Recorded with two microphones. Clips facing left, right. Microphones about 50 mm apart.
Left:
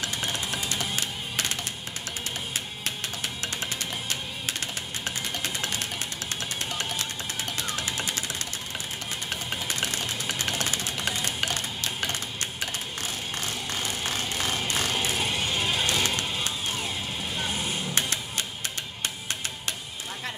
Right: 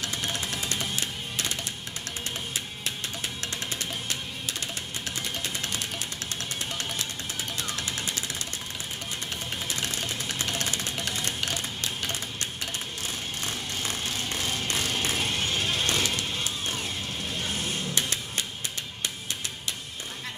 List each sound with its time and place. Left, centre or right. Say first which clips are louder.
0.0 s music: left 1 dB; left
7.7 s music: left 2 dB; left
9.3 s vehicle: left 3 dB; left
10.6 s a sound: left 2 dB; left
14.6 s music: left 2 dB; centre
15.0 s music: left 1 dB; centre